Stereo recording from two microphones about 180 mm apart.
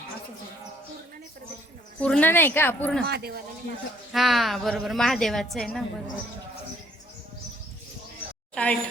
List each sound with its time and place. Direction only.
2.0 s speech: 5° left (ahead or behind)
3.0 s speech: 65° right (ahead or behind)
4.1 s a woman's voice: centre (ahead or behind)
8.5 s speech: 5° left (ahead or behind)